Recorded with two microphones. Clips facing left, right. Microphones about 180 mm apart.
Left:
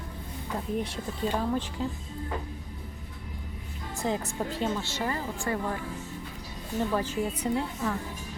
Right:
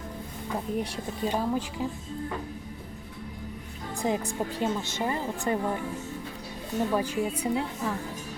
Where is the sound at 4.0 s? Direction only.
15° right (ahead or behind).